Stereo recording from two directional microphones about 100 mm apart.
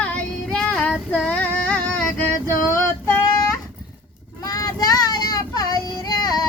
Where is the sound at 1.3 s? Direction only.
15° left (ahead or behind).